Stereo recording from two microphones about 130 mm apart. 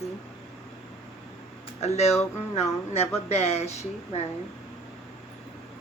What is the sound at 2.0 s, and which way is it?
Speech, 55° left (ahead or behind).